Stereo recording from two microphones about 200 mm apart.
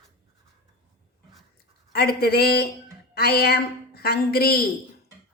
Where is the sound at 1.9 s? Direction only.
50° left (ahead or behind).